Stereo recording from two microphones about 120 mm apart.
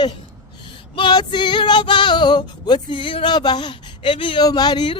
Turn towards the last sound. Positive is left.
turn(degrees=35)  # may be behind; listen again after turning